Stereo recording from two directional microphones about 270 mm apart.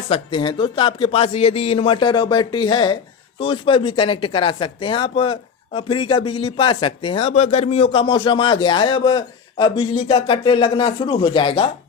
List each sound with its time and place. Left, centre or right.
0.1 s a man's voice: centre